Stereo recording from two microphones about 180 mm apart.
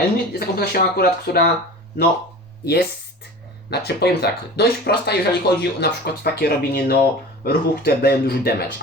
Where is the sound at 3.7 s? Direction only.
65° left (ahead or behind).